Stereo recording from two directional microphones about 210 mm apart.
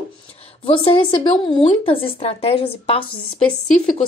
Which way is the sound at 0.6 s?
25° left (ahead or behind).